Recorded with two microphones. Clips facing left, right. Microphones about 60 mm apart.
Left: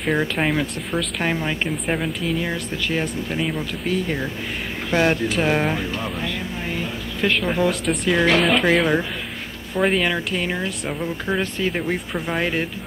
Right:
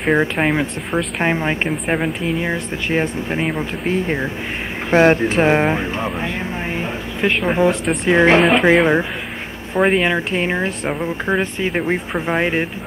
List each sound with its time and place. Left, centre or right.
0.0 s speech: right
8.5 s speech: centre